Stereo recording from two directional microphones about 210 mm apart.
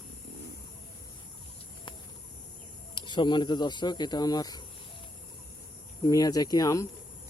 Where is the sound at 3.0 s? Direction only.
20° left (ahead or behind).